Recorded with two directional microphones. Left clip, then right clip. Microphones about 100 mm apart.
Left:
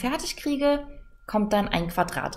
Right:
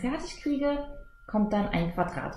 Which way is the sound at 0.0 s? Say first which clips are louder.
Left 4 dB; 15° left (ahead or behind).